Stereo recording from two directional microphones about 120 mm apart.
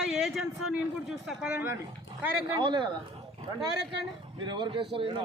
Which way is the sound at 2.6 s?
40° right (ahead or behind).